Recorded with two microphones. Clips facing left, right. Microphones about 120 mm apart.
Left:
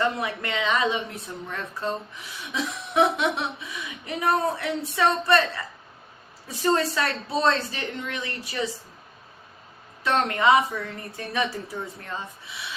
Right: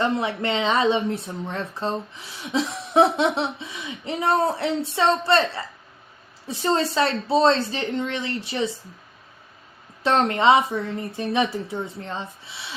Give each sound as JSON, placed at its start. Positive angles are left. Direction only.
{"t": 0.0, "sound": "speech", "side_deg": -25}
{"t": 10.0, "sound": "speech", "side_deg": -30}